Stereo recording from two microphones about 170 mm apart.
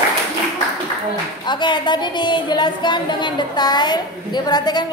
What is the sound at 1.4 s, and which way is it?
A woman's voice, 25° left (ahead or behind).